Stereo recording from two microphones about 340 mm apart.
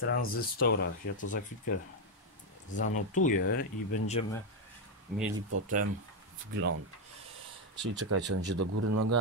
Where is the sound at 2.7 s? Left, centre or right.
Left.